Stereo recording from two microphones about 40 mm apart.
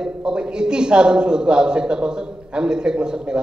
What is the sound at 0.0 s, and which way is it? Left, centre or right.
A man's voice, right.